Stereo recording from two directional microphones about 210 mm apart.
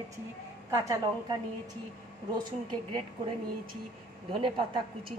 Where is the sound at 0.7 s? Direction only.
15° right (ahead or behind).